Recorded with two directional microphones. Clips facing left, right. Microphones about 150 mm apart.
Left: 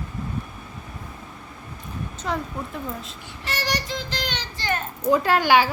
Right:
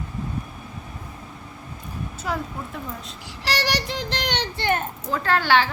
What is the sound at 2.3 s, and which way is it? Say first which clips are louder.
Speech: left 1 dB; 5° right (ahead or behind).